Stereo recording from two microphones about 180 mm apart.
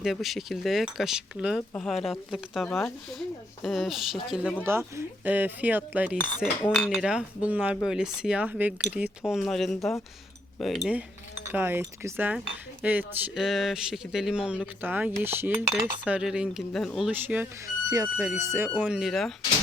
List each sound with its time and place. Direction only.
0.0 s speech: centre (ahead or behind)
4.6 s cutlery: 15° right (ahead or behind)
6.6 s speech: 5° left (ahead or behind)
11.5 s cutlery: 10° right (ahead or behind)
12.8 s speech: 10° right (ahead or behind)
14.8 s cutlery: 10° right (ahead or behind)
17.1 s cutlery: 10° right (ahead or behind)
17.8 s speech: 20° right (ahead or behind)
18.3 s cutlery: 15° right (ahead or behind)
18.8 s speech: 5° right (ahead or behind)